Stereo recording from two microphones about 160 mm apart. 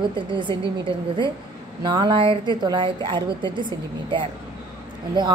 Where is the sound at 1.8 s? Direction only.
30° right (ahead or behind).